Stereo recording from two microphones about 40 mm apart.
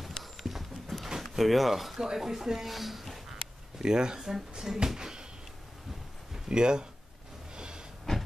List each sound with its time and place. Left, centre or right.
0.2 s a sound: centre
1.3 s speech: centre
2.0 s speech: centre
3.7 s speech: centre
6.3 s speech: right
7.5 s a sound: right
8.1 s hiss: centre